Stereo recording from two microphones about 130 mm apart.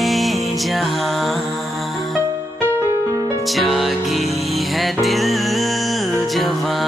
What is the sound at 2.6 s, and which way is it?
Music, 15° left (ahead or behind).